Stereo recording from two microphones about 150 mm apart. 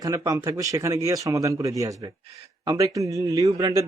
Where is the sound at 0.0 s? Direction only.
20° right (ahead or behind).